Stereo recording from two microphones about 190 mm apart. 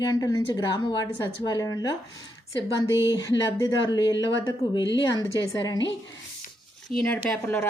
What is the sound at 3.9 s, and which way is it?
A woman's voice, 25° left (ahead or behind).